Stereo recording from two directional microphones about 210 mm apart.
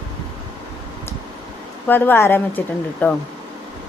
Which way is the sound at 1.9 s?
10° left (ahead or behind).